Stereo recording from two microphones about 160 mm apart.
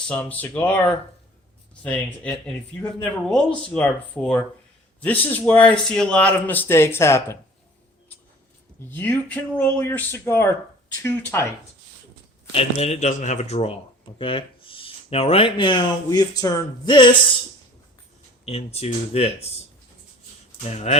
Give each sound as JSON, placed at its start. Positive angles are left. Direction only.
{"t": 0.1, "sound": "speech", "side_deg": 10}
{"t": 8.9, "sound": "speech", "side_deg": 10}
{"t": 12.5, "sound": "speech", "side_deg": 35}
{"t": 18.4, "sound": "speech", "side_deg": 40}
{"t": 20.7, "sound": "speech", "side_deg": 40}